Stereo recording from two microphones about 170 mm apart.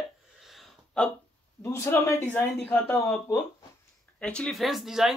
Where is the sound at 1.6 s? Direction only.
15° left (ahead or behind).